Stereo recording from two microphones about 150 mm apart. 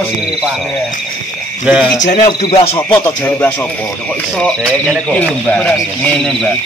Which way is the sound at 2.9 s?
10° left (ahead or behind).